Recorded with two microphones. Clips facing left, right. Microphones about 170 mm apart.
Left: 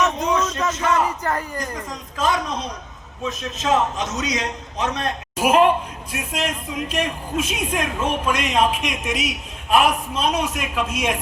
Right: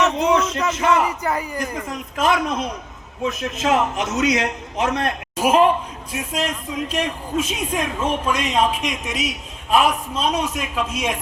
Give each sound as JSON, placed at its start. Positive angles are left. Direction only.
{"t": 0.2, "sound": "a man's voice", "side_deg": -10}
{"t": 1.9, "sound": "a man's voice", "side_deg": -60}
{"t": 5.4, "sound": "a man's voice", "side_deg": 5}